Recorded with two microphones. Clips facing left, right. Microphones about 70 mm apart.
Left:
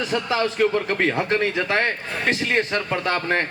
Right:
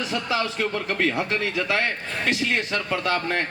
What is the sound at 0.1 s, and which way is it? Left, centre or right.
Speech, left.